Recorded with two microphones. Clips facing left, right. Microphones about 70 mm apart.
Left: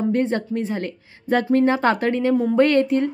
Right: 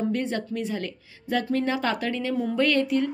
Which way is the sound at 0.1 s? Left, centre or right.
Left.